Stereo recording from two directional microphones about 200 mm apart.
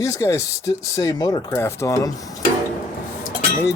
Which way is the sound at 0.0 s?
15° left (ahead or behind).